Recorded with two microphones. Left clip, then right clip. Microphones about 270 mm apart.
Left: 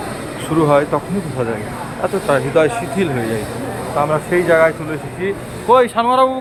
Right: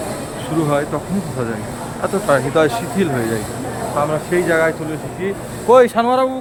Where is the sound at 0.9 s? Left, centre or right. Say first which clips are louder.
Left 3 dB; centre.